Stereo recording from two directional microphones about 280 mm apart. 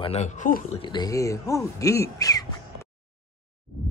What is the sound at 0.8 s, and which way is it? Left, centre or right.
Speech, centre.